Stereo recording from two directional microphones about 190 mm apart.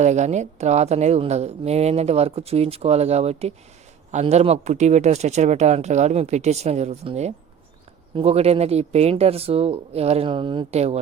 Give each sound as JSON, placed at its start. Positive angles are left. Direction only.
{"t": 0.0, "sound": "speech", "side_deg": -35}